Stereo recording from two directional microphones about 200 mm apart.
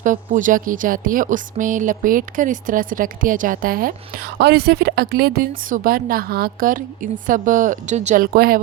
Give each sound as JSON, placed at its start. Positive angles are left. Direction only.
{"t": 0.0, "sound": "speech", "side_deg": -40}